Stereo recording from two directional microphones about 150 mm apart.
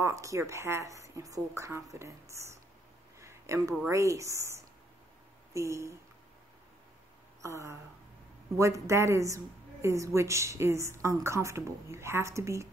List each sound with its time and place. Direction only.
0.0 s a woman's voice: 20° right (ahead or behind)
3.2 s a sound: 20° right (ahead or behind)
3.9 s a woman's voice: 20° right (ahead or behind)
7.4 s a woman's voice: 20° right (ahead or behind)